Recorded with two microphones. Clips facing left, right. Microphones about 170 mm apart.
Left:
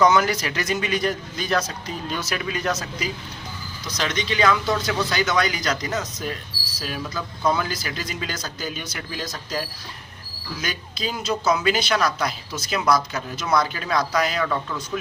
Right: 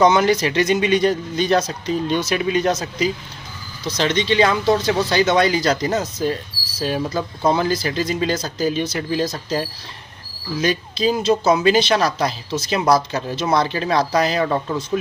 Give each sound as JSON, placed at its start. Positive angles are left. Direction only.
{"t": 0.0, "sound": "speech", "side_deg": -25}